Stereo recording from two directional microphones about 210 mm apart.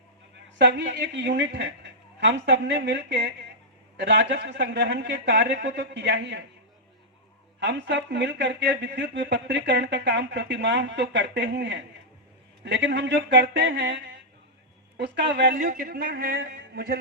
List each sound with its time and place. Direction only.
0.6 s speech: 55° right (ahead or behind)
7.6 s speech: 55° right (ahead or behind)
15.5 s a man's voice: 40° right (ahead or behind)